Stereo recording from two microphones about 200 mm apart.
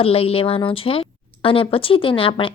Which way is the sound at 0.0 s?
30° left (ahead or behind).